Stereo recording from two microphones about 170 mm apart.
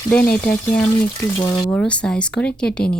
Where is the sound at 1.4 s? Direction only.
25° left (ahead or behind).